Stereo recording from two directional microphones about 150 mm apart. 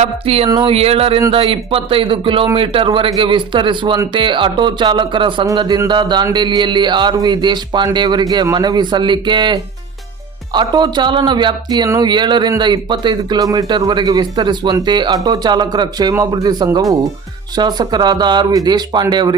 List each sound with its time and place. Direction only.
0.0 s speech: 40° right (ahead or behind)
0.4 s music: 25° right (ahead or behind)
0.7 s speech: 40° right (ahead or behind)
5.5 s music: 25° right (ahead or behind)
6.3 s speech: 30° right (ahead or behind)
7.9 s music: 30° right (ahead or behind)